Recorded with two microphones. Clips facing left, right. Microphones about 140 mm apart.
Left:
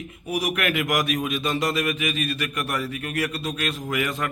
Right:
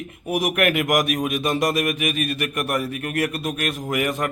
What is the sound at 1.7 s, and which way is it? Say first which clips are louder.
A man's voice: right 2 dB; 50° right (ahead or behind).